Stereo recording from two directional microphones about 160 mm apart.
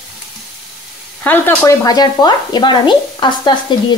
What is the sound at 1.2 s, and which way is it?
Speech, 10° left (ahead or behind).